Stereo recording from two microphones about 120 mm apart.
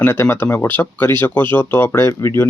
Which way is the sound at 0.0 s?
20° left (ahead or behind).